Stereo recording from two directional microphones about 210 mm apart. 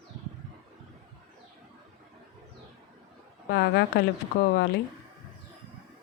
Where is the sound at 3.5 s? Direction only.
50° left (ahead or behind).